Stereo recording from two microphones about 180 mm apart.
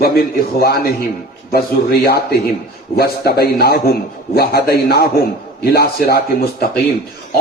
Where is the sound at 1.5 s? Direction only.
60° left (ahead or behind).